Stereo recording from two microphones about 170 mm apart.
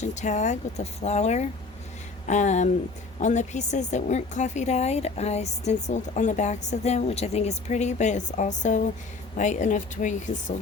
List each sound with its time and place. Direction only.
0.0 s a woman's voice: 45° left (ahead or behind)